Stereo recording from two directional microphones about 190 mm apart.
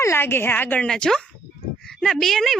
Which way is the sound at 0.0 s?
15° left (ahead or behind).